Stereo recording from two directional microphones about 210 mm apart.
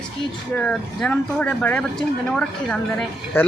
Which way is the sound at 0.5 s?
5° left (ahead or behind).